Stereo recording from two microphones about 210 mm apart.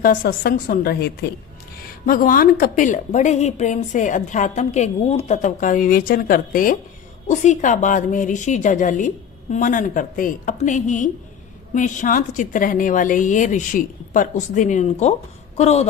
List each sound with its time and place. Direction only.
0.0 s a woman's voice: 45° left (ahead or behind)